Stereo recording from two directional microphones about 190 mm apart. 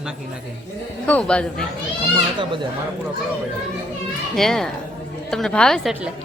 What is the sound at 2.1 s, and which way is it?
Speech, 25° right (ahead or behind).